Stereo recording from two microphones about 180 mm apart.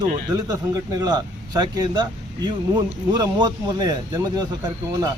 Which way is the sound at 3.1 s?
20° right (ahead or behind).